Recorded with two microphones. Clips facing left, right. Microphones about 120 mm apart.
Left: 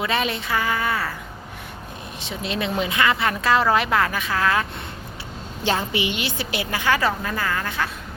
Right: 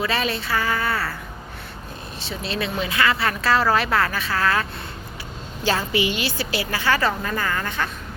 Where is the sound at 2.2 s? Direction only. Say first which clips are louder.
Left 1 dB; 20° left (ahead or behind).